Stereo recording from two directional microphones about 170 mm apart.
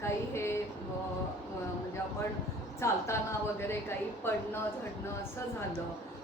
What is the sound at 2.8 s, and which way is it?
A woman's voice, 15° left (ahead or behind).